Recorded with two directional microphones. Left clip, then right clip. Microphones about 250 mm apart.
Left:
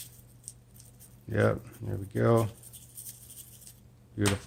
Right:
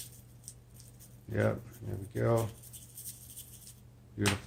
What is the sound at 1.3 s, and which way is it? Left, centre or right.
Speech, left.